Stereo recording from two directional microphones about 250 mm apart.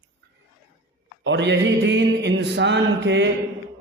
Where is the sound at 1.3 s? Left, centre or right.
Right.